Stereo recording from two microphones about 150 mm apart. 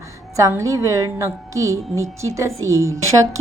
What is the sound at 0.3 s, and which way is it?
A woman's voice, 20° right (ahead or behind).